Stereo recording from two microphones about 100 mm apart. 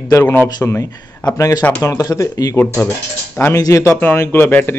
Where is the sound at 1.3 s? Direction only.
35° left (ahead or behind).